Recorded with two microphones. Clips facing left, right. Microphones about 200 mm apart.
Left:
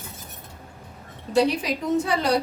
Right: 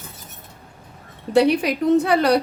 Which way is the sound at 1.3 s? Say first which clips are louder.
Right 5 dB; 60° right (ahead or behind).